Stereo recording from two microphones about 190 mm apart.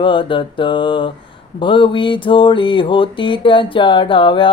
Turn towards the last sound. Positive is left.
turn(degrees=25)  # may be behind; listen again after turning